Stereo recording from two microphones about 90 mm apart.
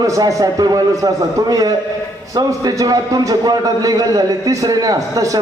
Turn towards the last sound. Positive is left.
turn(degrees=-40)  # may be behind; listen again after turning